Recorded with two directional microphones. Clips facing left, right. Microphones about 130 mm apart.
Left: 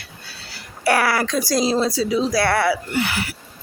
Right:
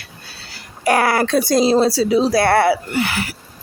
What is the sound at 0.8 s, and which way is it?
Speech, 20° right (ahead or behind).